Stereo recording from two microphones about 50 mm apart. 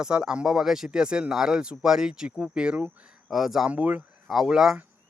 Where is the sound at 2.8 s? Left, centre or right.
Right.